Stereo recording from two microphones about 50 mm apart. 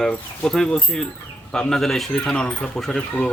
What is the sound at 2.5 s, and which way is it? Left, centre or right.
Speech, left.